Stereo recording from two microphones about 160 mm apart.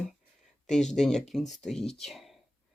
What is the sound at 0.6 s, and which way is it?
Speech, 5° left (ahead or behind).